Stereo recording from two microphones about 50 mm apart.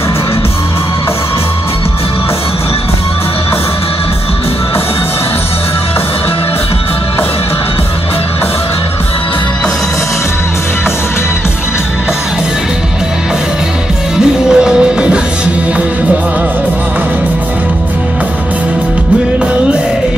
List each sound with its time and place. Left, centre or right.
14.2 s music: centre